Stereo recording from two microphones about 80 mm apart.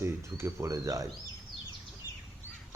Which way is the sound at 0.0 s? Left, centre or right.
Right.